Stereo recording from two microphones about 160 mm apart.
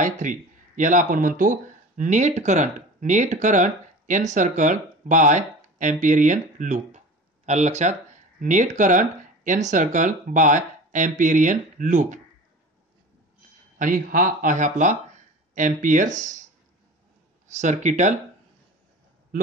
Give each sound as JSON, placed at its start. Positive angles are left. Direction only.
{"t": 0.0, "sound": "speech", "side_deg": -55}
{"t": 13.7, "sound": "speech", "side_deg": -55}
{"t": 17.6, "sound": "speech", "side_deg": -50}